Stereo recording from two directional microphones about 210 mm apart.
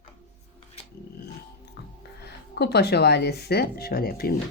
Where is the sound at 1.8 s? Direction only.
50° left (ahead or behind).